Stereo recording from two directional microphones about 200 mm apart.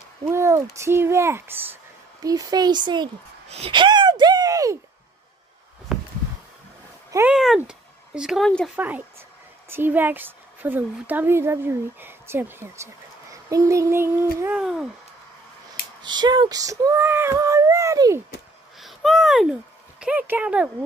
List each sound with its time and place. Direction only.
0.2 s a sound: 15° right (ahead or behind)
0.7 s speech: 10° right (ahead or behind)
5.9 s a sound: centre (ahead or behind)
7.1 s speech: 15° right (ahead or behind)
7.3 s speech: centre (ahead or behind)
8.7 s speech: 10° right (ahead or behind)
16.0 s speech: 20° right (ahead or behind)
18.8 s a sound: centre (ahead or behind)
20.0 s speech: 5° right (ahead or behind)